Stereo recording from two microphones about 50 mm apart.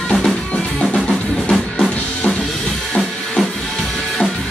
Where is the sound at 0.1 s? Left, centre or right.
Centre.